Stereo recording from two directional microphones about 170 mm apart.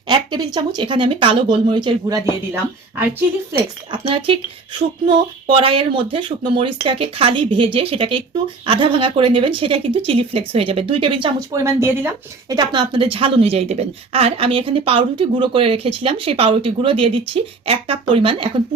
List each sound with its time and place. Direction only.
0.1 s speech: 25° right (ahead or behind)
3.9 s a woman's voice: 30° right (ahead or behind)
11.3 s a woman's voice: 15° right (ahead or behind)
12.5 s a woman's voice: 25° right (ahead or behind)